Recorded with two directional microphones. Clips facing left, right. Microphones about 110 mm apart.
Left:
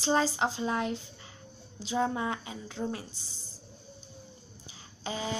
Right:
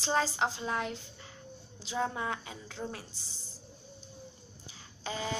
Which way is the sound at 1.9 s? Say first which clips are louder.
Left 4 dB; 10° left (ahead or behind).